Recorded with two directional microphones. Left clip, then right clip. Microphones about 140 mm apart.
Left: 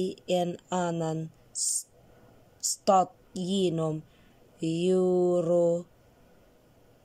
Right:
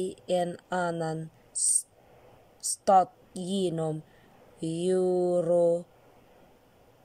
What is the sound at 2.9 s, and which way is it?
Speech, 5° left (ahead or behind).